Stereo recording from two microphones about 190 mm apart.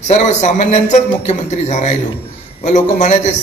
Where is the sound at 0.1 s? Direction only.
35° left (ahead or behind).